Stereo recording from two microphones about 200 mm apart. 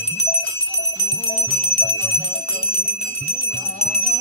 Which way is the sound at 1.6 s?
30° left (ahead or behind).